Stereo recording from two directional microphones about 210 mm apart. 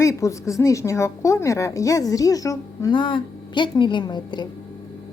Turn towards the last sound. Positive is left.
turn(degrees=20)  # may be behind; listen again after turning